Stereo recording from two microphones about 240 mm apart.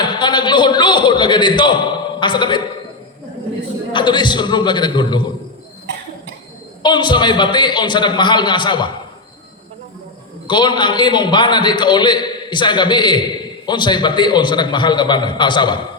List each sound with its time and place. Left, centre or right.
0.0 s a man's voice: centre
3.9 s a man's voice: centre
5.9 s cough: right
6.8 s a man's voice: centre
10.4 s a man's voice: centre